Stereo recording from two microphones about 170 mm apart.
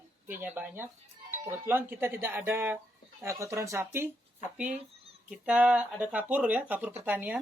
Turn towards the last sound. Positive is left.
turn(degrees=-10)  # may be behind; listen again after turning